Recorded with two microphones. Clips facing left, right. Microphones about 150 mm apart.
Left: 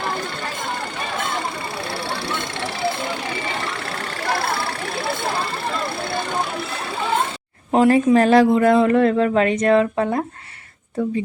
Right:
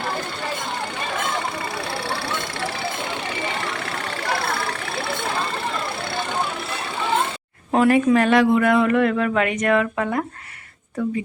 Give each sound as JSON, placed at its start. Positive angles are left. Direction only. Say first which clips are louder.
{"t": 7.7, "sound": "speech", "louder": "left 2 dB", "side_deg": 30}